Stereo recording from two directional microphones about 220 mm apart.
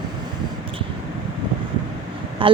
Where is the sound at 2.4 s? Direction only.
25° right (ahead or behind).